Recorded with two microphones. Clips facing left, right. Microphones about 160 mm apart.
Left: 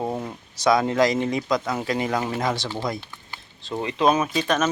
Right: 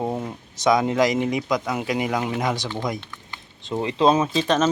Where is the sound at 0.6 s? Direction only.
15° right (ahead or behind).